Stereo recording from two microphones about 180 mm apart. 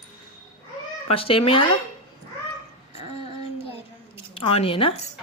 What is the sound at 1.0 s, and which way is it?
Speech, 30° left (ahead or behind).